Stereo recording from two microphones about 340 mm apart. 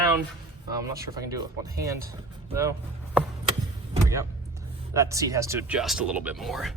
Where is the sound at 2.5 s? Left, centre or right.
Centre.